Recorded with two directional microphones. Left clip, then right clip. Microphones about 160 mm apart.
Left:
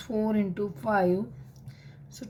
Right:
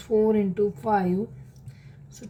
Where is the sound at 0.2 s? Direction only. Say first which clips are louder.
Right 6 dB; 30° left (ahead or behind).